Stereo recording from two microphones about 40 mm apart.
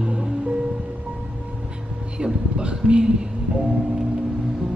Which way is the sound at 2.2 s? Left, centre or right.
Right.